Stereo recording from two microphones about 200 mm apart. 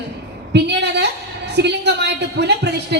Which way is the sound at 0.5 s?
60° right (ahead or behind).